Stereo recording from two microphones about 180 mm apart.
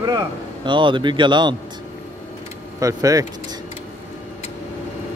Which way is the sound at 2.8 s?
20° right (ahead or behind).